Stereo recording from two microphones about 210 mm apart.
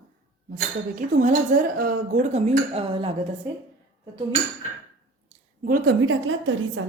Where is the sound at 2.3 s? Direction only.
25° right (ahead or behind).